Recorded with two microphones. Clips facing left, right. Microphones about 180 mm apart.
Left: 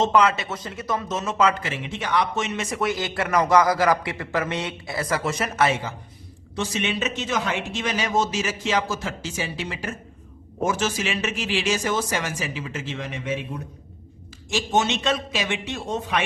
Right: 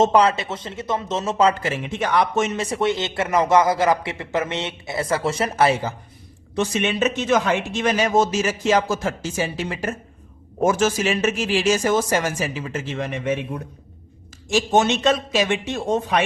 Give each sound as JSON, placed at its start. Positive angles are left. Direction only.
{"t": 0.0, "sound": "a man's voice", "side_deg": -35}
{"t": 6.6, "sound": "a man's voice", "side_deg": -50}